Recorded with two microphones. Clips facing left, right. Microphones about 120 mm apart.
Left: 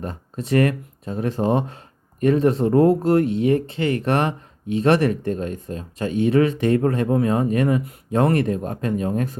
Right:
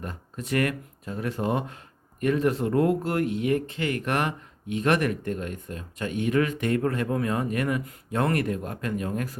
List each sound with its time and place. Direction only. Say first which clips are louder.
0.0 s speech: left 6 dB; 35° left (ahead or behind)